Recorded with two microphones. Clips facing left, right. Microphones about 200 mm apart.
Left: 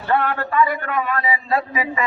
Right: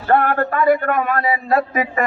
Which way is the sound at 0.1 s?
55° right (ahead or behind).